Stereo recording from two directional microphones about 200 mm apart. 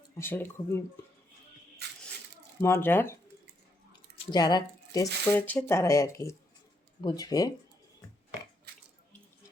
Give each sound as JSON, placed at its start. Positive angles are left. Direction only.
{"t": 0.2, "sound": "speech", "side_deg": 10}
{"t": 2.6, "sound": "speech", "side_deg": 10}